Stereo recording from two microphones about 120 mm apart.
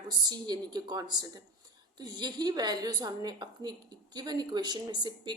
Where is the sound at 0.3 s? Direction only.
35° right (ahead or behind).